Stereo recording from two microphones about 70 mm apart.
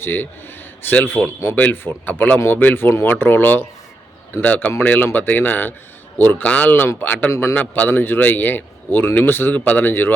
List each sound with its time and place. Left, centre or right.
0.0 s a man's voice: left
7.3 s a man's voice: left
7.5 s a man's voice: left